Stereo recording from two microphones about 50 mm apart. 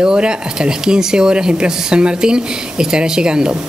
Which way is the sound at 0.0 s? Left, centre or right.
Centre.